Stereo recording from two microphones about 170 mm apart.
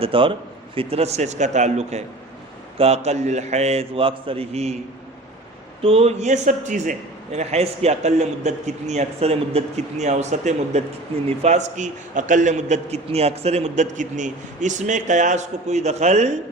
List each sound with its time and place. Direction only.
0.0 s a man's voice: 30° right (ahead or behind)
5.8 s a man's voice: 35° right (ahead or behind)